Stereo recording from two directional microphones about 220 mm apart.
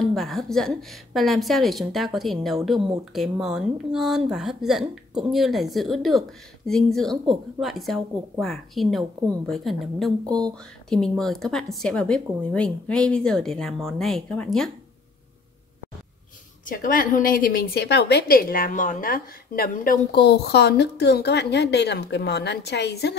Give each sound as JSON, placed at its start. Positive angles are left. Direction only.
{"t": 0.1, "sound": "a woman's voice", "side_deg": 0}
{"t": 16.6, "sound": "a woman's voice", "side_deg": 40}